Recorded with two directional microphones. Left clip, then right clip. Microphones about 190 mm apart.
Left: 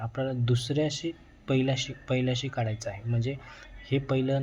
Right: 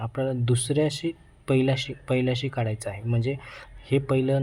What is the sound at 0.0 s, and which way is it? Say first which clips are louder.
Speech: right 4 dB; 15° right (ahead or behind).